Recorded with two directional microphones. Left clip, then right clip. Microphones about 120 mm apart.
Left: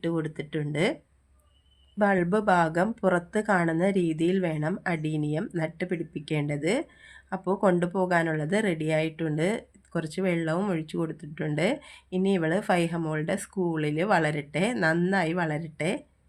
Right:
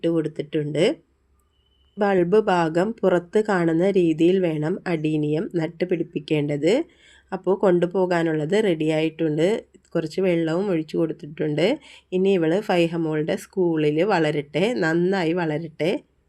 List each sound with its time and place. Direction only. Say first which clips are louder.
0.0 s speech: right 7 dB; 15° right (ahead or behind)
2.0 s a woman's voice: right 6 dB; 25° right (ahead or behind)